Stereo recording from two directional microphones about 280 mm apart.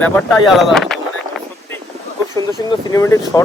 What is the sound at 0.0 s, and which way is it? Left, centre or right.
Speech, centre.